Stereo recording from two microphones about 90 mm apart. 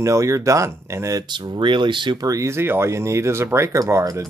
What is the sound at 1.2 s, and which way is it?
Speech, 60° right (ahead or behind).